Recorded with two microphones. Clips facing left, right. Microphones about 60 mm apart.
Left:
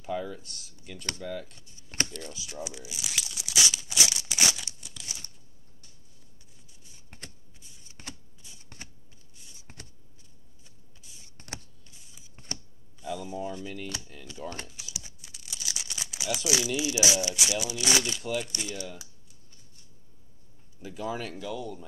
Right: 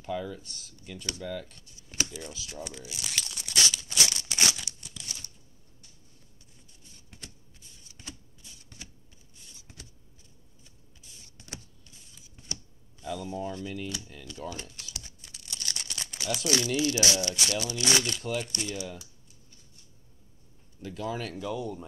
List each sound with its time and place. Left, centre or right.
0.0 s speech: centre
1.8 s computer keyboard: left
2.5 s crumpling: centre
7.1 s a sound: left
9.7 s vehicle: left
10.6 s a sound: centre
12.4 s shuffling cards: left
13.0 s speech: centre
14.7 s typing: centre
15.0 s speech: centre
20.8 s speech: centre
21.4 s speech: centre